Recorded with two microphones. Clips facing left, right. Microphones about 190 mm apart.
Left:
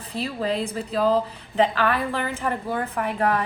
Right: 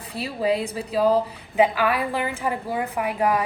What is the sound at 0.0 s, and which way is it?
A woman's voice, 15° right (ahead or behind).